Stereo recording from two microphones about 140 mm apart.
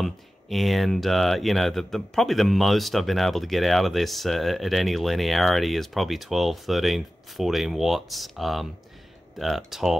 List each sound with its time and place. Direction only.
0.0 s speech: centre (ahead or behind)